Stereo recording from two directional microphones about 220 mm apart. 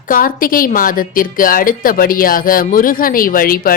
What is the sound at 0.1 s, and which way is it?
A woman's voice, 40° left (ahead or behind).